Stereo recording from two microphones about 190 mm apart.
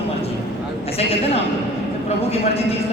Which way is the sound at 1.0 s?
30° left (ahead or behind).